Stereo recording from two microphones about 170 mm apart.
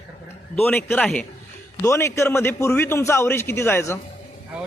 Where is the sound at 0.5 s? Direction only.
10° left (ahead or behind).